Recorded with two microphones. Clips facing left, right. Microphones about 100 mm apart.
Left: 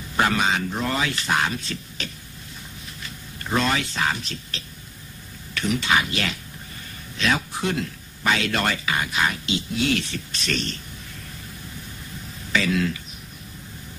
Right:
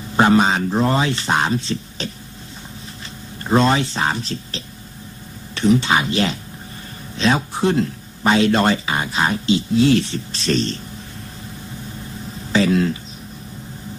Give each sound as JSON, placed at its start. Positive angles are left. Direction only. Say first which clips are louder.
{"t": 0.1, "sound": "speech", "louder": "right 7 dB", "side_deg": -30}
{"t": 3.4, "sound": "speech", "louder": "right 7 dB", "side_deg": -30}
{"t": 12.5, "sound": "speech", "louder": "right 6 dB", "side_deg": -30}